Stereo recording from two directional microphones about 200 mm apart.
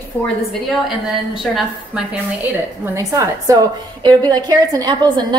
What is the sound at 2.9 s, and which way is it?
A woman's voice, 15° right (ahead or behind).